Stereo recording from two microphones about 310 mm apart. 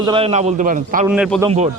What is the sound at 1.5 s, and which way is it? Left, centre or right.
Speech, right.